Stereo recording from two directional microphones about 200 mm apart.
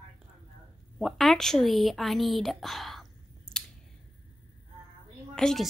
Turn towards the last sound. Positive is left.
turn(degrees=5)  # may be behind; listen again after turning